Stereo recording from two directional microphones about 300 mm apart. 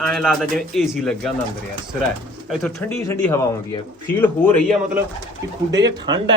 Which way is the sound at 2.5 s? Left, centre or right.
Centre.